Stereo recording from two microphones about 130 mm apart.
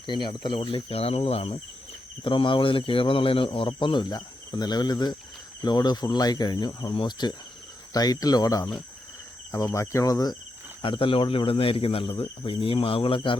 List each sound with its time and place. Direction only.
0.0 s speech: 35° left (ahead or behind)
10.8 s speech: 40° left (ahead or behind)